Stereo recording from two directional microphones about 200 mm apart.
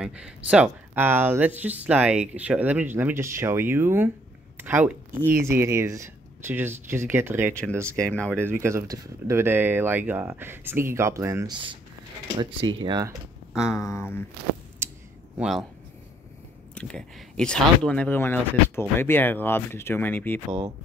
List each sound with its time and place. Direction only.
0.0 s speech: 5° right (ahead or behind)
7.9 s speech: 5° left (ahead or behind)
8.3 s speech: 10° right (ahead or behind)
13.5 s a sound: 5° right (ahead or behind)
13.7 s speech: 15° left (ahead or behind)
14.8 s a sound: 10° right (ahead or behind)
15.3 s speech: centre (ahead or behind)
16.7 s speech: 5° left (ahead or behind)